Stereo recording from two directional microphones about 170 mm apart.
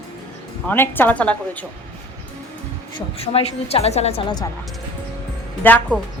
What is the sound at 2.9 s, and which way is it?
A woman's voice, 35° left (ahead or behind).